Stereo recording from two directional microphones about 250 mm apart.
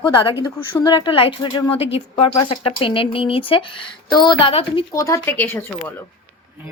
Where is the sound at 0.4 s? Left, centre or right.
Centre.